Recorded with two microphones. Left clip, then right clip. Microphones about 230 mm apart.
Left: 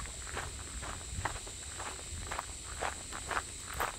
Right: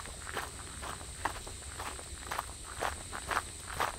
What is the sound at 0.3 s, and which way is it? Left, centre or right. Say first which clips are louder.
Walk: right 3 dB; right.